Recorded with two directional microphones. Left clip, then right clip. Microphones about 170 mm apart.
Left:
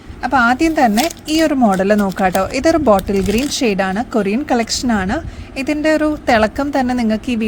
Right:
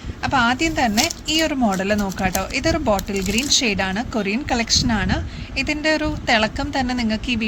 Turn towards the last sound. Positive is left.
turn(degrees=50)  # may be behind; listen again after turning